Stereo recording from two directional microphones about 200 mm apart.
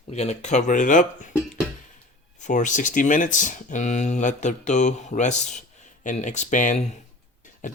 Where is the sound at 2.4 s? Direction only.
40° left (ahead or behind).